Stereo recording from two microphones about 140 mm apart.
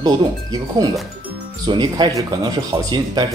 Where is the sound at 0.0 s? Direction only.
25° right (ahead or behind).